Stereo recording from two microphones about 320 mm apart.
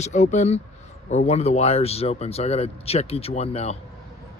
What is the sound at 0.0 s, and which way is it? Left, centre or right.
Speech, left.